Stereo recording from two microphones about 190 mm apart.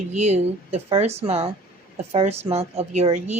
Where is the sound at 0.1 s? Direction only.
35° right (ahead or behind).